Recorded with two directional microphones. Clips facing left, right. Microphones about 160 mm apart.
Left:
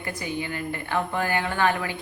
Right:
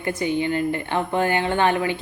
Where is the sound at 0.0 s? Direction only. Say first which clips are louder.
Right 8 dB; 25° right (ahead or behind).